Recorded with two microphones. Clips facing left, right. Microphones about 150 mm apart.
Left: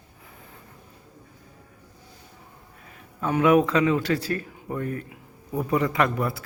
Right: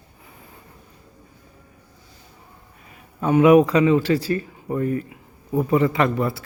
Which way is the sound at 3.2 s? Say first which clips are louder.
Right 6 dB; 10° right (ahead or behind).